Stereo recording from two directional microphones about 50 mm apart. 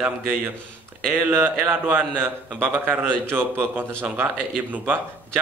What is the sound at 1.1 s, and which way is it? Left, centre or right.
A man's voice, right.